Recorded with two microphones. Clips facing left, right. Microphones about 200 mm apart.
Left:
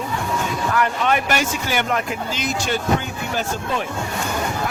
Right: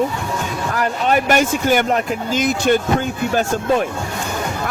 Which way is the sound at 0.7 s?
40° right (ahead or behind).